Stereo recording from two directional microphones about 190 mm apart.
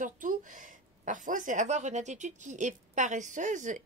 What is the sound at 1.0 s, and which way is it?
A woman's voice, 45° right (ahead or behind).